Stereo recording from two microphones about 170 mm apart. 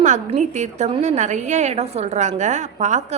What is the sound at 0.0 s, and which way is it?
A woman's voice, 45° right (ahead or behind).